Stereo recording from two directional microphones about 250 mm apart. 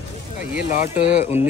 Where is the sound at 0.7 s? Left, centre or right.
Left.